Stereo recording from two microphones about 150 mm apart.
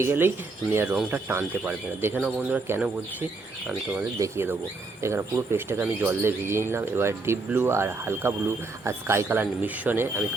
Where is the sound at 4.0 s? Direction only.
15° right (ahead or behind).